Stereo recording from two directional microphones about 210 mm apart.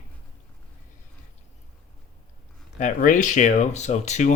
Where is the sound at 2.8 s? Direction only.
35° left (ahead or behind).